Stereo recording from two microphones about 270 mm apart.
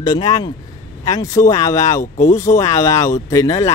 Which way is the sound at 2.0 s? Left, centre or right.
Left.